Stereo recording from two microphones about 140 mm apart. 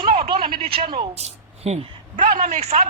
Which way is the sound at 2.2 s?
60° right (ahead or behind).